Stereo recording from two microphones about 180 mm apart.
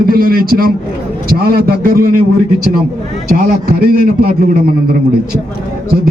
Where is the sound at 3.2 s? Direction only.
50° right (ahead or behind).